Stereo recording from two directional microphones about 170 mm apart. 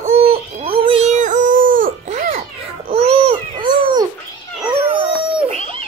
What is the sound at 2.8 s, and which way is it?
Babbling, 35° right (ahead or behind).